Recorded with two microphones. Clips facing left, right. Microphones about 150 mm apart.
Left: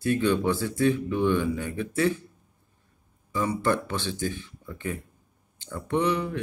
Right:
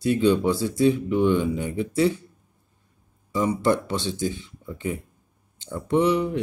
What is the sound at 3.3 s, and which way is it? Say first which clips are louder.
Speech: right 4 dB; 20° right (ahead or behind).